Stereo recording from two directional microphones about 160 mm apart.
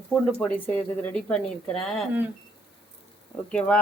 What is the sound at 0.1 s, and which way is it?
Speech, 10° left (ahead or behind).